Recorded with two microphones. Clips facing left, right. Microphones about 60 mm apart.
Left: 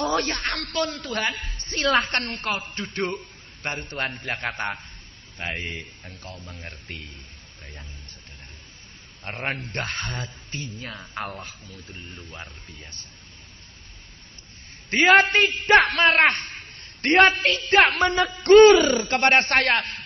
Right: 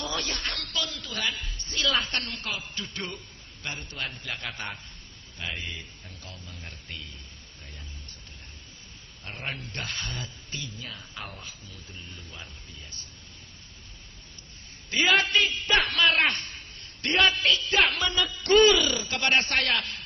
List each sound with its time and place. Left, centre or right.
0.0 s a man's voice: left
9.2 s a man's voice: left
14.9 s a man's voice: left